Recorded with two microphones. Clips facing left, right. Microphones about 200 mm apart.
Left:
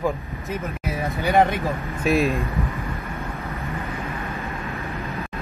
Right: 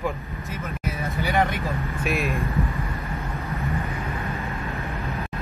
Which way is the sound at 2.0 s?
35° left (ahead or behind).